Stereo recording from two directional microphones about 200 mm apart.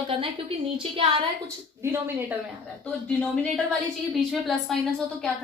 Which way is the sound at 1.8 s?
10° right (ahead or behind).